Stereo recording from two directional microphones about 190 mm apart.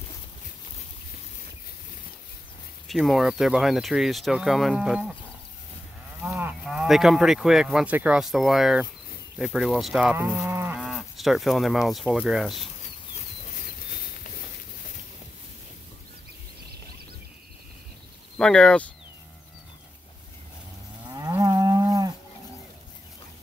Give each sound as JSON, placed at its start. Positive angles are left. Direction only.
{"t": 2.9, "sound": "speech", "side_deg": 0}
{"t": 6.2, "sound": "cattle", "side_deg": -10}
{"t": 6.6, "sound": "speech", "side_deg": -5}
{"t": 9.4, "sound": "cattle", "side_deg": 0}
{"t": 10.8, "sound": "speech", "side_deg": 0}
{"t": 18.4, "sound": "speech", "side_deg": 5}
{"t": 21.1, "sound": "moo", "side_deg": -20}